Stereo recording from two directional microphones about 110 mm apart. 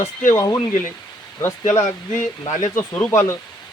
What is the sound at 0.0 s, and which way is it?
Speech, 30° left (ahead or behind).